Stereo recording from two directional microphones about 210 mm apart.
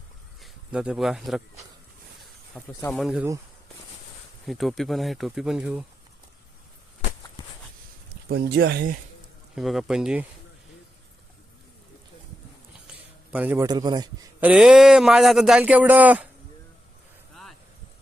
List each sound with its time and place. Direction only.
0.4 s speech: 5° right (ahead or behind)
2.8 s speech: centre (ahead or behind)
4.4 s speech: centre (ahead or behind)
8.3 s speech: 50° right (ahead or behind)
9.6 s speech: centre (ahead or behind)
13.3 s a man's voice: 10° right (ahead or behind)
14.4 s speech: 5° right (ahead or behind)